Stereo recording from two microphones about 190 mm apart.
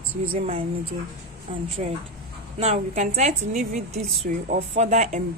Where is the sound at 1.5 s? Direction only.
30° right (ahead or behind).